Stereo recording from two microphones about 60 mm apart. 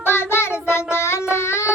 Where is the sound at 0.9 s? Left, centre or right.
Left.